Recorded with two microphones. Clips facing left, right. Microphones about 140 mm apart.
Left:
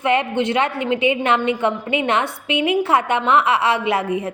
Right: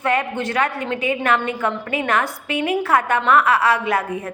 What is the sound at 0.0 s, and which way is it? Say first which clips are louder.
A woman's voice: left 3 dB; 25° left (ahead or behind).